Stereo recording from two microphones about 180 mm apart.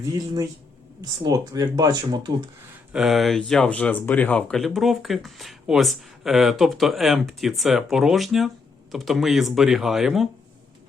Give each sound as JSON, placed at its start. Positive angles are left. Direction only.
{"t": 1.2, "sound": "speech", "side_deg": -20}
{"t": 2.9, "sound": "speech", "side_deg": 0}